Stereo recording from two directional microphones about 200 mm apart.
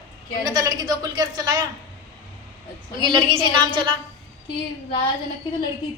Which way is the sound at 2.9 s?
20° right (ahead or behind).